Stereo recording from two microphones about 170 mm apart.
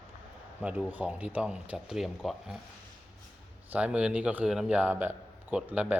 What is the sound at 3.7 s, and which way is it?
A man's voice, 5° right (ahead or behind).